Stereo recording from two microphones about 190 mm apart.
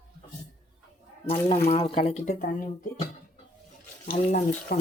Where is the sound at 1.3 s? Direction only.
35° left (ahead or behind).